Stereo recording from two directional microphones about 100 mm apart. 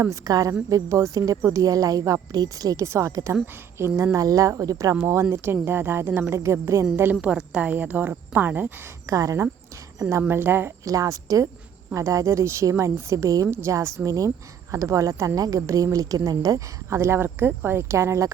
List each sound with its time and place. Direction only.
0.0 s a woman's voice: 35° right (ahead or behind)
1.4 s speech: 25° right (ahead or behind)
1.6 s a woman's voice: 35° right (ahead or behind)
5.3 s speech: 25° right (ahead or behind)
6.9 s a woman's voice: 20° right (ahead or behind)
9.0 s a woman's voice: 30° right (ahead or behind)
10.8 s a woman's voice: 35° right (ahead or behind)